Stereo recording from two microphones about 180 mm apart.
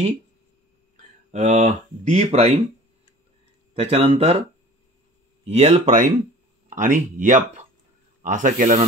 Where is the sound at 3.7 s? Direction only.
35° right (ahead or behind).